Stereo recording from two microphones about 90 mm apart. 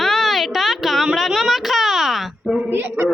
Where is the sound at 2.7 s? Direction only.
25° right (ahead or behind).